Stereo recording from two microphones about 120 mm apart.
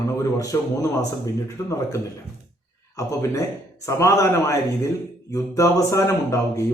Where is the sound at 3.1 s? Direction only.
25° left (ahead or behind).